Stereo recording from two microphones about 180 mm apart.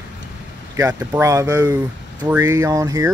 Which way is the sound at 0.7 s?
15° right (ahead or behind).